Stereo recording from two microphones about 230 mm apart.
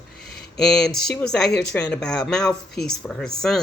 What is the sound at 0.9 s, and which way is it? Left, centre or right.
Speech, left.